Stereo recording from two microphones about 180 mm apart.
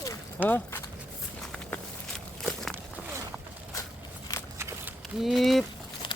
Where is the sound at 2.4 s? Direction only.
Centre (ahead or behind).